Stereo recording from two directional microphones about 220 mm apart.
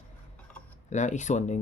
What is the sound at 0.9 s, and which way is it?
Speech, 35° left (ahead or behind).